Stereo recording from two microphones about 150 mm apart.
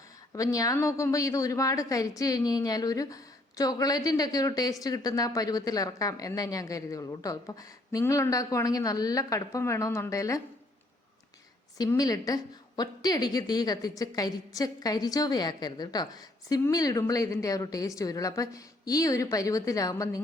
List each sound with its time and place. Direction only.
0.3 s a woman's voice: 20° left (ahead or behind)
11.8 s a woman's voice: 25° left (ahead or behind)